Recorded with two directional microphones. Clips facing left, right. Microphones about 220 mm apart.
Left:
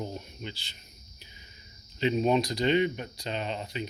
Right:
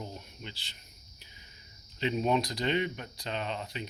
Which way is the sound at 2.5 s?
Centre (ahead or behind).